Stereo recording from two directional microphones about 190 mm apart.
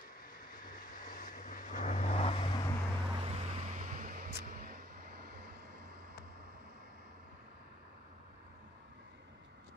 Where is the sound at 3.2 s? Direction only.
30° right (ahead or behind); by 5.8 s 55° right (ahead or behind).